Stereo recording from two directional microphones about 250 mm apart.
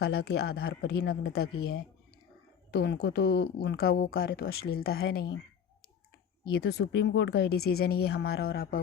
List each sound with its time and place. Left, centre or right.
0.0 s speech: left
2.7 s speech: left
6.5 s speech: left